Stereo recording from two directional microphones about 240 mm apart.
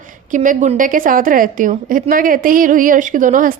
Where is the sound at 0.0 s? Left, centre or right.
Right.